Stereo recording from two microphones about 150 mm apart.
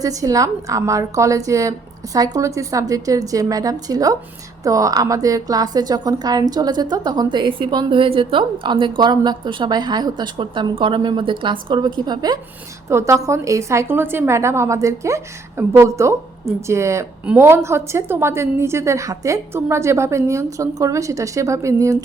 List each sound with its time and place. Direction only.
0.0 s a woman's voice: 25° right (ahead or behind)